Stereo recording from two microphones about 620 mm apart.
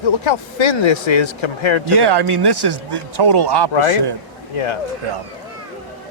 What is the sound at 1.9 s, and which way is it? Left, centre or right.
A man's voice, right.